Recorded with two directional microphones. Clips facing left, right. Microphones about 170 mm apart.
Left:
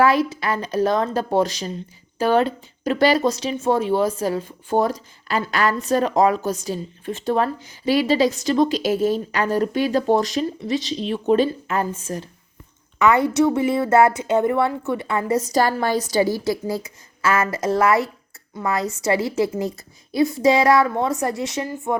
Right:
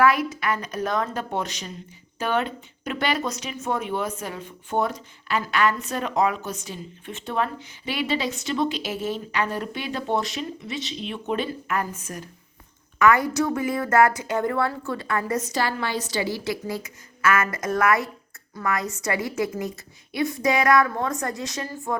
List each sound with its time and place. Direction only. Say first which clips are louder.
0.0 s speech: left 3 dB; 30° left (ahead or behind)
15.4 s speech: left 6 dB; 40° left (ahead or behind)